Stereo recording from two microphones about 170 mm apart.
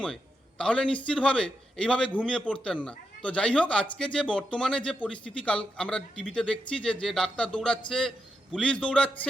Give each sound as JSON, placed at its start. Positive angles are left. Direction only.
{"t": 0.6, "sound": "a man's voice", "side_deg": 5}